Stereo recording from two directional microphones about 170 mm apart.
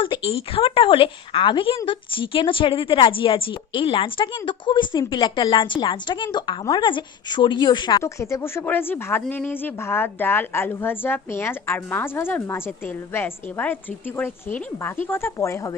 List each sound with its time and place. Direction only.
0.0 s a woman's voice: 30° left (ahead or behind)